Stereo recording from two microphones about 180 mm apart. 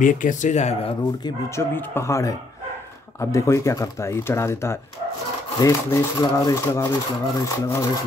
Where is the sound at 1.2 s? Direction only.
15° left (ahead or behind).